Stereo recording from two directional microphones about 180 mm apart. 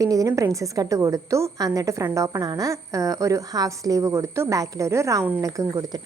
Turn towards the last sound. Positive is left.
turn(degrees=-20)  # may be behind; listen again after turning